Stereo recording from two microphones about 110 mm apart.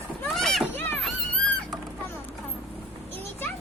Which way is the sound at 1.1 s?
Centre (ahead or behind).